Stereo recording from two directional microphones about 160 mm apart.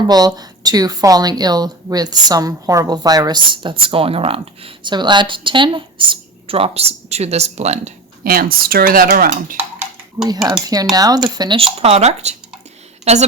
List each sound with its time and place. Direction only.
0.0 s speech: 25° right (ahead or behind); by 7.9 s 45° right (ahead or behind)
8.2 s speech: 65° right (ahead or behind)
9.6 s dishes: 10° right (ahead or behind)
10.2 s speech: 20° right (ahead or behind); by 13.2 s 40° right (ahead or behind)